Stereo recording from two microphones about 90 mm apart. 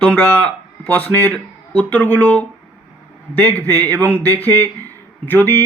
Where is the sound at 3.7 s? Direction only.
20° left (ahead or behind).